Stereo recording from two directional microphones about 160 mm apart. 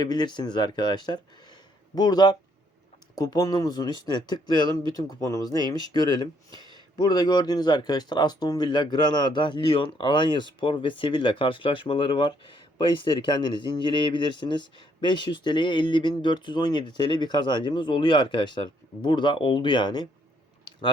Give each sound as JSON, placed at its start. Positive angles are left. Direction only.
{"t": 0.0, "sound": "speech", "side_deg": 25}
{"t": 6.6, "sound": "a sound", "side_deg": -30}
{"t": 6.9, "sound": "speech", "side_deg": 25}